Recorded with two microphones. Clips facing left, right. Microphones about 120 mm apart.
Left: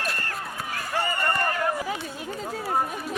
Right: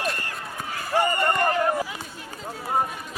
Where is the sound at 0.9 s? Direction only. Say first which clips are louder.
Right 5 dB; 15° right (ahead or behind).